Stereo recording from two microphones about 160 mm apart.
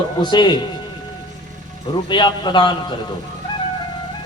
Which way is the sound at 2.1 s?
30° left (ahead or behind).